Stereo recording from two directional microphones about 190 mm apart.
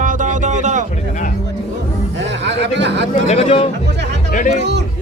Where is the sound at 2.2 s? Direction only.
70° right (ahead or behind).